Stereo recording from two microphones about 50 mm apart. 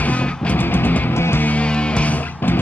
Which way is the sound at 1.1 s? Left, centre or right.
Left.